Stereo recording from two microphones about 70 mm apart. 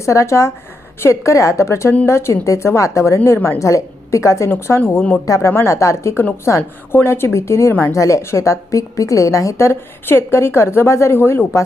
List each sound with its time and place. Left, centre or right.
0.0 s a woman's voice: left
3.6 s a woman's voice: left
4.5 s a woman's voice: left
5.2 s a woman's voice: left
7.7 s a woman's voice: left
7.9 s a woman's voice: left